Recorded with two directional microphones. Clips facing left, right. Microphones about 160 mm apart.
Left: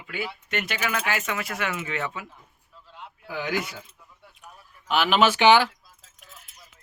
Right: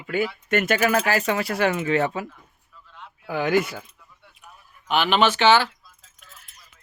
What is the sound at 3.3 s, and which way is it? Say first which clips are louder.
Speech: right 7 dB; 55° right (ahead or behind).